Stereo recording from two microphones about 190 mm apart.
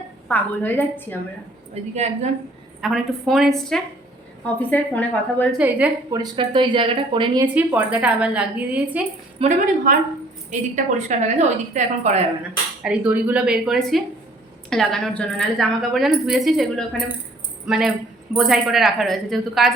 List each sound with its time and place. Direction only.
0.3 s a woman's voice: 10° left (ahead or behind)
1.7 s a woman's voice: 35° right (ahead or behind)
2.8 s a woman's voice: centre (ahead or behind)
5.5 s a woman's voice: 5° right (ahead or behind)
6.1 s speech: 25° right (ahead or behind)
7.4 s a woman's voice: 10° right (ahead or behind)
9.4 s a woman's voice: 40° right (ahead or behind)
12.8 s a woman's voice: 5° right (ahead or behind)